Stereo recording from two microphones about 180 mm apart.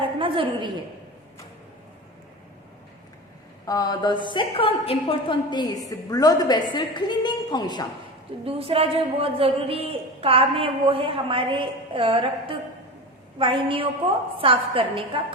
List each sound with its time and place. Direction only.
0.0 s a sound: 30° right (ahead or behind)
3.7 s a woman's voice: 20° left (ahead or behind)
8.4 s a woman's voice: 30° right (ahead or behind)